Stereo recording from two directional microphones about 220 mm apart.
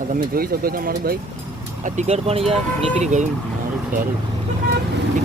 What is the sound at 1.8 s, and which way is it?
Speech, 30° right (ahead or behind).